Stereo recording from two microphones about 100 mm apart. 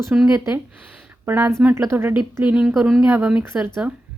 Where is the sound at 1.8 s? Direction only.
30° right (ahead or behind).